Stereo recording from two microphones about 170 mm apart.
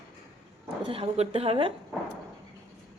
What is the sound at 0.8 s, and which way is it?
Speech, 35° right (ahead or behind).